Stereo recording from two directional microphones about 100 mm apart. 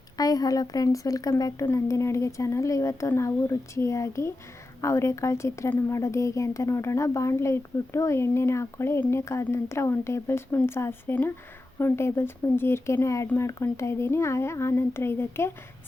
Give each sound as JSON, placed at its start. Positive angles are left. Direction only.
{"t": 0.2, "sound": "a woman's voice", "side_deg": 40}